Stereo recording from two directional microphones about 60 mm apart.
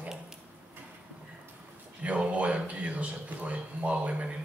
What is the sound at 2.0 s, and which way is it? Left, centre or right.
A woman's voice, right.